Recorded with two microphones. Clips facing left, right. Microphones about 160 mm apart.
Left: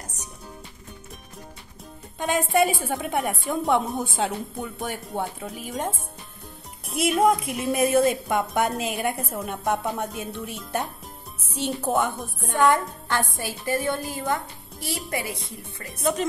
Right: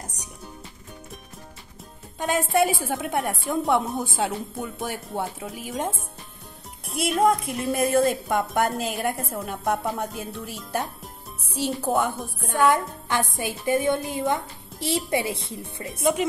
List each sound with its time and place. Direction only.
2.1 s a woman's voice: centre (ahead or behind)
12.7 s a woman's voice: 15° right (ahead or behind)
15.9 s speech: 5° right (ahead or behind)